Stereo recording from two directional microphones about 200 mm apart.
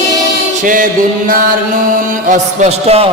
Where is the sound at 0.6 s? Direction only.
40° right (ahead or behind).